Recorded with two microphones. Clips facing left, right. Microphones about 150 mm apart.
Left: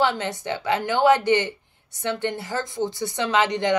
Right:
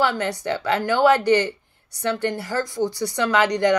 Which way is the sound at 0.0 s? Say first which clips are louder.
Right 1 dB; 20° left (ahead or behind).